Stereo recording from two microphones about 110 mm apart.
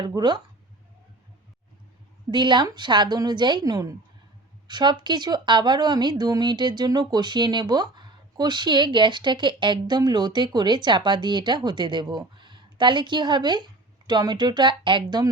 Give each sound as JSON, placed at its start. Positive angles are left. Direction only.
{"t": 0.0, "sound": "speech", "side_deg": -40}
{"t": 2.3, "sound": "a woman's voice", "side_deg": -45}